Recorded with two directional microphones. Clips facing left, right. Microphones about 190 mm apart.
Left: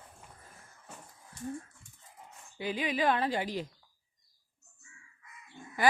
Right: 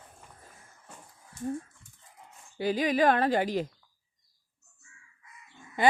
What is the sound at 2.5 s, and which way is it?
A woman's voice, 40° right (ahead or behind).